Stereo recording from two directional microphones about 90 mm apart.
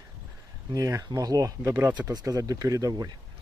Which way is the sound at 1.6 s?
25° right (ahead or behind).